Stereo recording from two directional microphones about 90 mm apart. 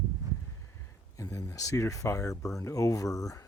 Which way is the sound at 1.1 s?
40° left (ahead or behind).